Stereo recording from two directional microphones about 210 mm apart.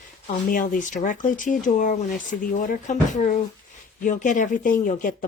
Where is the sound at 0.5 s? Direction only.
40° left (ahead or behind).